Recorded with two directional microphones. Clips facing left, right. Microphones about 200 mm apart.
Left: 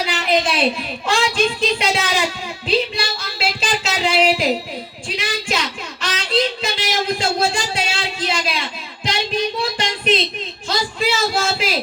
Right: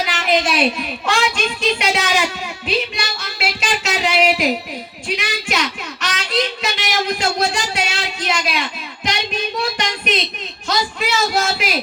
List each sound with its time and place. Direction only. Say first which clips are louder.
0.2 s a child's voice: right 1 dB; 30° left (ahead or behind)